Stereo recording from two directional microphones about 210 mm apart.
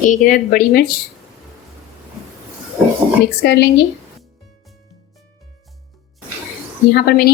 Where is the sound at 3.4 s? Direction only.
50° left (ahead or behind).